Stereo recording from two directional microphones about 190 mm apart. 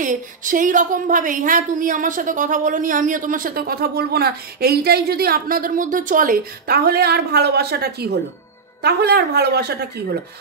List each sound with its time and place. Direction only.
0.0 s a woman's voice: 45° right (ahead or behind)